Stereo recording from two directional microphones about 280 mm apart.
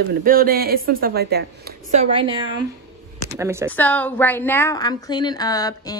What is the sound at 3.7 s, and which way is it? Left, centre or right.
A woman's voice, centre.